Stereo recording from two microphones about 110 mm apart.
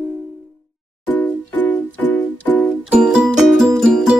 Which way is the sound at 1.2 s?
15° left (ahead or behind).